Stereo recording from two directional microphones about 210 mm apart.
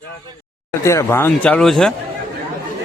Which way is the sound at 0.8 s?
15° left (ahead or behind).